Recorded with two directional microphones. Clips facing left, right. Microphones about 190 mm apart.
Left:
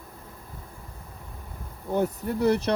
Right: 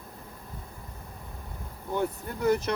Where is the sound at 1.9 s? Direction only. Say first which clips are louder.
Left 5 dB; 35° left (ahead or behind).